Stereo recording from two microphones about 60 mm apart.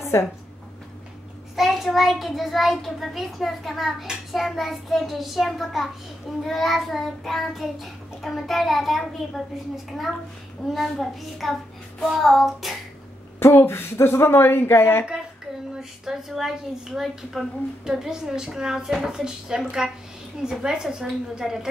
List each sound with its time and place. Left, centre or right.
0.1 s a woman's voice: left
1.6 s a child's voice: centre
10.6 s a child's voice: centre
13.4 s speech: left
15.7 s speech: centre